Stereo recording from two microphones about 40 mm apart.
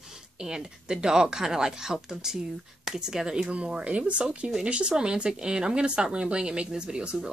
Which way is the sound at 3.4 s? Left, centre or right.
Right.